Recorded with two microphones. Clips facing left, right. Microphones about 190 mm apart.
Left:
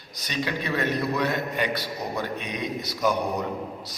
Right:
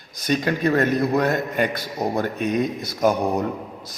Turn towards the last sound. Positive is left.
turn(degrees=-50)  # may be behind; listen again after turning